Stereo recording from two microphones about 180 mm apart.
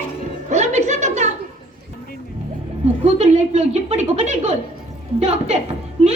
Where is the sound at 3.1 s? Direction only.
40° right (ahead or behind).